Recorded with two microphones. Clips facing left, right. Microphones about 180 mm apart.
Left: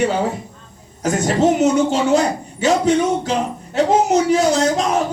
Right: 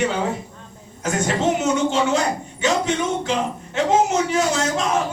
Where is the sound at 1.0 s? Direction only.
40° left (ahead or behind).